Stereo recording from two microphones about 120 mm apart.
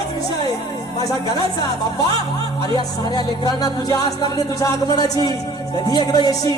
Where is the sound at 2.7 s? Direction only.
35° left (ahead or behind).